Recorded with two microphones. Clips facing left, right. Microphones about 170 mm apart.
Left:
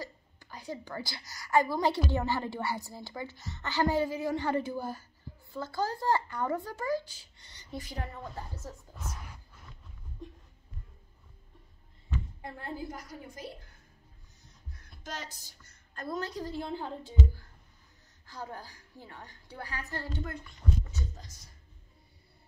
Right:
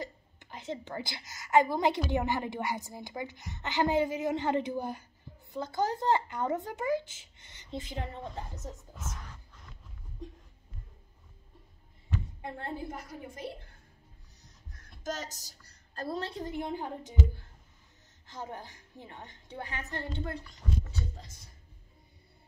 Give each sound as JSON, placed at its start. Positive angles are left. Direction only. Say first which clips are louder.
{"t": 0.0, "sound": "a woman's voice", "louder": "right 2 dB", "side_deg": -20}
{"t": 8.9, "sound": "speech", "louder": "even", "side_deg": 0}
{"t": 12.4, "sound": "speech", "louder": "right 1 dB", "side_deg": -25}
{"t": 15.0, "sound": "speech", "louder": "right 5 dB", "side_deg": -45}